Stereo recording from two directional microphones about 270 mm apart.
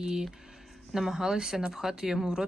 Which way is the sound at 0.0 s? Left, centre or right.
Centre.